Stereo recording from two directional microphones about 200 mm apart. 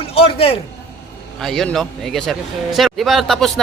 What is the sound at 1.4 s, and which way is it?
Speech, centre (ahead or behind).